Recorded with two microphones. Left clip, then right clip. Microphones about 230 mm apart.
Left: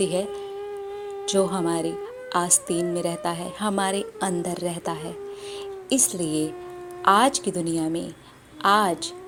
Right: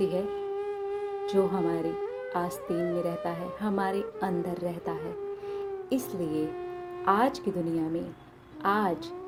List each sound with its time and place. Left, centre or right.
0.0 s a woman's voice: centre
0.7 s a sound: centre
1.2 s a woman's voice: centre
2.6 s speech: centre
3.0 s a woman's voice: centre